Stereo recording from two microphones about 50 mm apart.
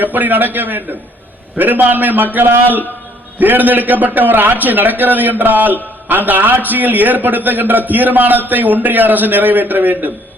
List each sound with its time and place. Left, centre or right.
0.0 s a man's voice: right